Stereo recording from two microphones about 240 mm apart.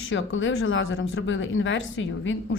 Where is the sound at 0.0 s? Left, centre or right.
Left.